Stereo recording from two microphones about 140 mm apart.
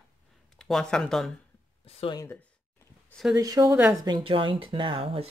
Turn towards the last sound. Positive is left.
turn(degrees=-40)  # may be behind; listen again after turning